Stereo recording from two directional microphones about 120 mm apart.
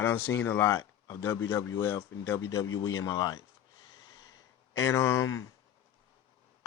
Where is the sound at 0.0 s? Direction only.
20° left (ahead or behind).